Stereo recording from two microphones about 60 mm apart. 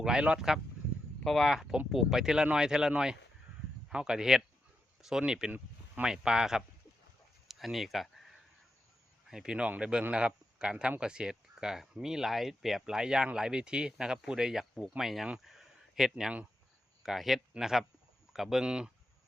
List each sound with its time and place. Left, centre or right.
0.0 s speech: centre
1.2 s speech: centre
7.4 s a sound: centre
9.3 s speech: centre
9.6 s speech: right; by 15.3 s centre
15.4 s a sound: centre
17.0 s speech: centre